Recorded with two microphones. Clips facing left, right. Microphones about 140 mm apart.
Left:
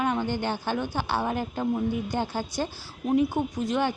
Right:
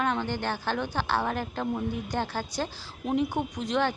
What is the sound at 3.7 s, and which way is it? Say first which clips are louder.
Speech: right 1 dB; 10° left (ahead or behind).